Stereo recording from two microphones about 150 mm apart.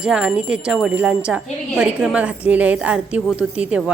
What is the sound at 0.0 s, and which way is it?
Speech, 5° right (ahead or behind).